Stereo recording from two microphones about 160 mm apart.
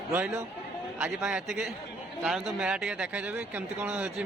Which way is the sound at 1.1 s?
5° right (ahead or behind).